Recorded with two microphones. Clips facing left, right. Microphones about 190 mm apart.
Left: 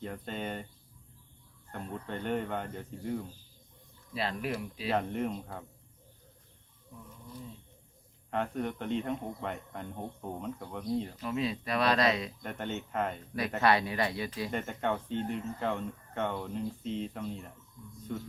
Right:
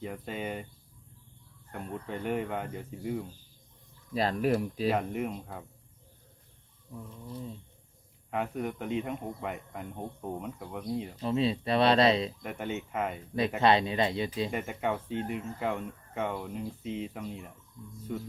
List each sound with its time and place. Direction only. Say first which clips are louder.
0.0 s speech: right 1 dB; 5° right (ahead or behind)
1.7 s speech: right 1 dB; 5° right (ahead or behind)
4.1 s speech: right 7 dB; 40° right (ahead or behind)
4.9 s speech: even; 5° right (ahead or behind)
8.3 s speech: even; 5° right (ahead or behind)
11.2 s speech: right 4 dB; 30° right (ahead or behind)
12.4 s speech: right 2 dB; 5° right (ahead or behind)
13.6 s speech: right 2 dB; 25° right (ahead or behind)
14.5 s speech: right 1 dB; 5° right (ahead or behind)